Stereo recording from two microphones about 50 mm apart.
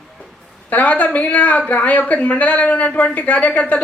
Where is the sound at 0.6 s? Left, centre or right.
Left.